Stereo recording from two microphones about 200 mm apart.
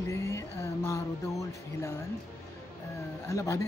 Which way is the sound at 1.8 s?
15° left (ahead or behind).